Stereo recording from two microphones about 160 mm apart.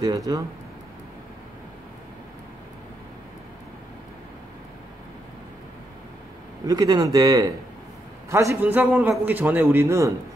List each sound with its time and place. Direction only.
0.3 s speech: 25° right (ahead or behind)
6.6 s a man's voice: 25° right (ahead or behind)